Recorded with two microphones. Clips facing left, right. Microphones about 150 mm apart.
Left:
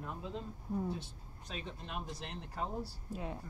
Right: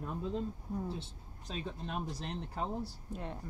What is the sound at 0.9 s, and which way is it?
Speech, 30° right (ahead or behind).